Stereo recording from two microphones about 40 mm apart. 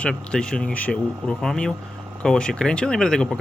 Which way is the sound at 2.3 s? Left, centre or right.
Left.